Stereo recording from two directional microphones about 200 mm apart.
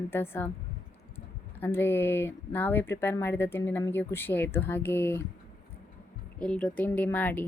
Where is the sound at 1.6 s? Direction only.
10° left (ahead or behind).